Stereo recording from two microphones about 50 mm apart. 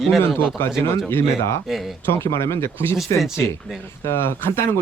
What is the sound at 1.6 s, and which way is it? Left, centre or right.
Speech, centre.